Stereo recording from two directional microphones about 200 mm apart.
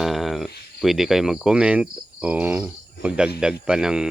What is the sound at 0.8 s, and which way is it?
Cricket, centre (ahead or behind).